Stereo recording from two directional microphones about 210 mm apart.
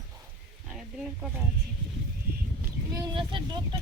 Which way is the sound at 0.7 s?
Centre (ahead or behind).